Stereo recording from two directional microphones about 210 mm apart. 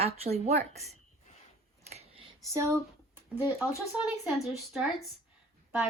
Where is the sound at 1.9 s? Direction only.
30° right (ahead or behind).